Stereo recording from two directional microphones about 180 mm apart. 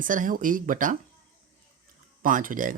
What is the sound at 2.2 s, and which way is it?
Speech, 50° right (ahead or behind).